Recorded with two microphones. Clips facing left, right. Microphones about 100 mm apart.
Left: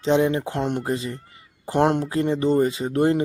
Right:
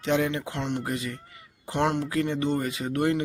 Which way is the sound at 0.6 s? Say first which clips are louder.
Left 5 dB; 45° left (ahead or behind).